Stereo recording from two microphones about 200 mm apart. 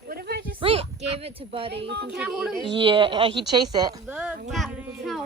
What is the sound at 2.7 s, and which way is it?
A woman's voice, 25° right (ahead or behind).